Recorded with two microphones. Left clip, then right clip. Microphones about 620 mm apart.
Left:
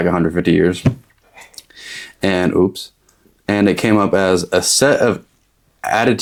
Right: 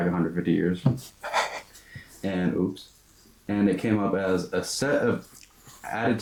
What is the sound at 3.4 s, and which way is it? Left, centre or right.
Speech, left.